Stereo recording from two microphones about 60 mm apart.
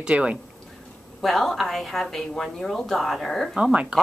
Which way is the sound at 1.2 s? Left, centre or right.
Centre.